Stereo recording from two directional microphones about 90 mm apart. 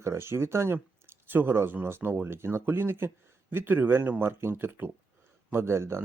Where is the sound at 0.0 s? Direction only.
30° right (ahead or behind).